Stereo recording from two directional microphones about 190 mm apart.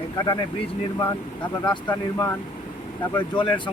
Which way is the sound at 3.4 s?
25° left (ahead or behind).